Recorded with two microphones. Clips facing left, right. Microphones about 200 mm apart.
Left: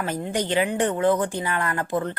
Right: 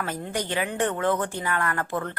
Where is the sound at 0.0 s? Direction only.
15° left (ahead or behind).